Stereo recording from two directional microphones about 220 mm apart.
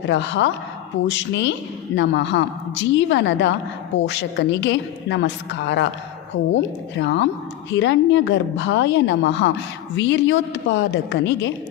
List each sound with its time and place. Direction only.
0.1 s a woman's voice: 55° left (ahead or behind)